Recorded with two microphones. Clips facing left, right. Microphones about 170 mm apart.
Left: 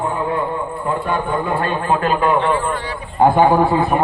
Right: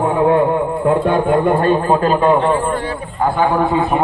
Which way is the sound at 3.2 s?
15° left (ahead or behind).